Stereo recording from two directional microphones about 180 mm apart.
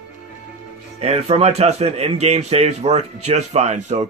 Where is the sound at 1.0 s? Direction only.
35° right (ahead or behind).